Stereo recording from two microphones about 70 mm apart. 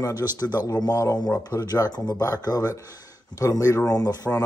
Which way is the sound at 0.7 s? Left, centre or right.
Left.